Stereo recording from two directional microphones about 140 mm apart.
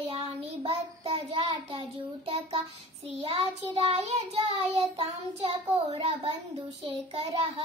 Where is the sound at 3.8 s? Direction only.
45° right (ahead or behind).